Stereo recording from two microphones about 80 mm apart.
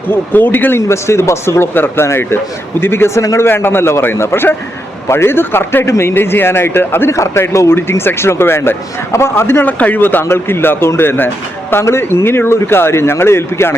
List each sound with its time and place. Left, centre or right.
0.1 s speech: left
0.8 s a man's voice: left